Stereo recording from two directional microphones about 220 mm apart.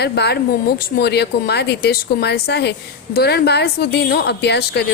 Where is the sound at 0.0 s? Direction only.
50° left (ahead or behind).